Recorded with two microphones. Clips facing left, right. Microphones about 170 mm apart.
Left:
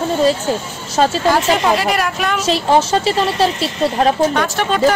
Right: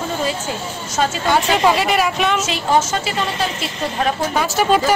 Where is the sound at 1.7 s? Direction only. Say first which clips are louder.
Even; centre (ahead or behind).